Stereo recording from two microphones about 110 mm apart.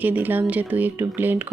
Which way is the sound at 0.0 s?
15° right (ahead or behind).